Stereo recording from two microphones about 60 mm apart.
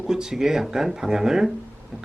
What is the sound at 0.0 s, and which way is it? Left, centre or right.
A man's voice, centre.